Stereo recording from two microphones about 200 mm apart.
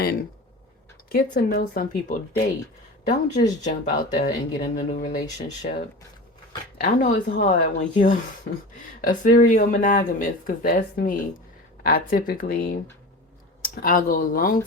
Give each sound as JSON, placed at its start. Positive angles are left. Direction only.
{"t": 0.0, "sound": "speech", "side_deg": 50}